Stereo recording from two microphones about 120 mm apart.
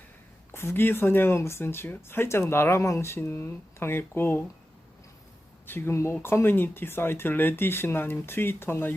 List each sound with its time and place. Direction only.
0.5 s speech: 20° left (ahead or behind)
5.6 s speech: 20° left (ahead or behind)